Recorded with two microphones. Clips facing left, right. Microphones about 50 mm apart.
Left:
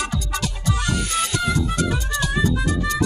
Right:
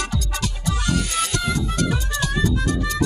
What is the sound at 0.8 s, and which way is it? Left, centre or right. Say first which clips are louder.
Music: right 2 dB; centre.